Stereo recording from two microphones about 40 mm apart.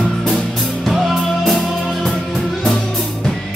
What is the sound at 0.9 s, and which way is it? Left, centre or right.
Music, centre.